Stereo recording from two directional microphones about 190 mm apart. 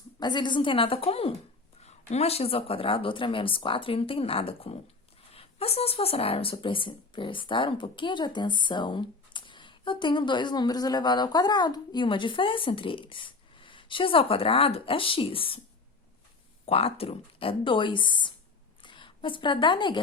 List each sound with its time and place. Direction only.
0.2 s speech: 25° left (ahead or behind)
16.6 s a woman's voice: 30° left (ahead or behind)